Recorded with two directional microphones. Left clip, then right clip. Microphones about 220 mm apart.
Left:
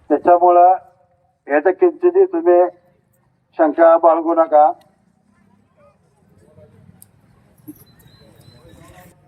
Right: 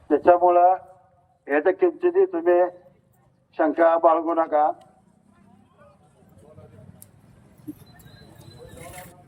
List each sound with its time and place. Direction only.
0.1 s a man's voice: 25° left (ahead or behind)